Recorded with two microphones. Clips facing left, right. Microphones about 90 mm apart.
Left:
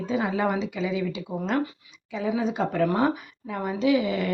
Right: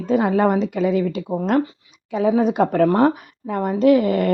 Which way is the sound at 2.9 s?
50° right (ahead or behind).